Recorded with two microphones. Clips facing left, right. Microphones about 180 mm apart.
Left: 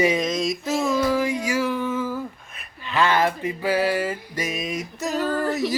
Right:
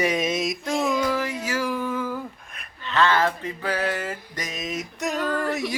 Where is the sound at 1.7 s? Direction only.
Centre (ahead or behind).